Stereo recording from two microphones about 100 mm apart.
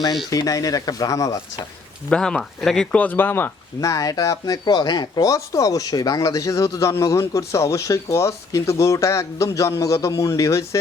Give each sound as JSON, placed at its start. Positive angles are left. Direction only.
{"t": 0.3, "sound": "speech", "side_deg": 35}
{"t": 2.0, "sound": "speech", "side_deg": 10}
{"t": 3.8, "sound": "speech", "side_deg": 35}